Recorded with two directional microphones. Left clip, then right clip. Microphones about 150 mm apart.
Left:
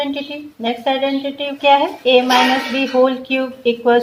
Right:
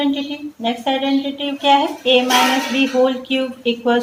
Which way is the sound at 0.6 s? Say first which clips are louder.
Left 2 dB; 35° left (ahead or behind).